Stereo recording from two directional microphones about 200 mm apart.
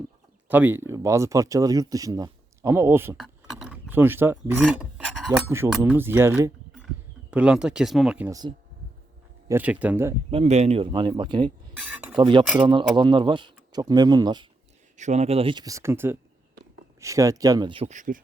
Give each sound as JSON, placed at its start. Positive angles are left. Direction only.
{"t": 0.4, "sound": "speech", "side_deg": -10}
{"t": 3.2, "sound": "a sound", "side_deg": 0}
{"t": 5.5, "sound": "speech", "side_deg": -15}
{"t": 8.3, "sound": "speech", "side_deg": -20}
{"t": 9.5, "sound": "speech", "side_deg": -10}
{"t": 10.3, "sound": "speech", "side_deg": -30}
{"t": 11.8, "sound": "speech", "side_deg": -5}
{"t": 12.1, "sound": "speech", "side_deg": -25}
{"t": 14.9, "sound": "speech", "side_deg": -35}